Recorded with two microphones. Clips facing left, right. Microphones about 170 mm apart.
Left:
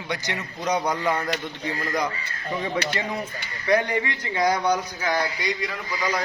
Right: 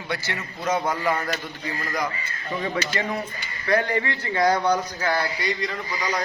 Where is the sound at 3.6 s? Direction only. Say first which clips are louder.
Left 1 dB; 15° left (ahead or behind).